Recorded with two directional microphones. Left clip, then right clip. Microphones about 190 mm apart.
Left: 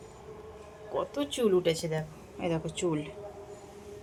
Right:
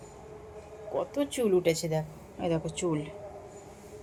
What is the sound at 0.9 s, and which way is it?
A woman's voice, 15° right (ahead or behind).